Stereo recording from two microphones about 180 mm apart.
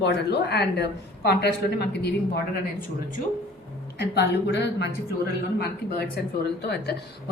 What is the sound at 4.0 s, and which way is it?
Speech, 70° left (ahead or behind).